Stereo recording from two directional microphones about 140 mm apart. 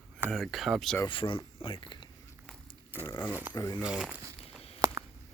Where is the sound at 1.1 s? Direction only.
40° left (ahead or behind).